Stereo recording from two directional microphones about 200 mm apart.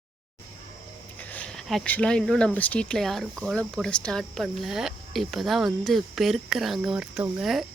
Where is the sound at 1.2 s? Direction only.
5° left (ahead or behind).